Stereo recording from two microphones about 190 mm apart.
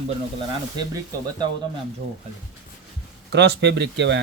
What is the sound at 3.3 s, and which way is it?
Speech, 60° right (ahead or behind).